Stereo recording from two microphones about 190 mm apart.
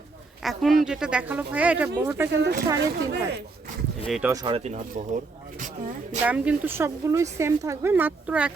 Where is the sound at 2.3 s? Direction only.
65° right (ahead or behind).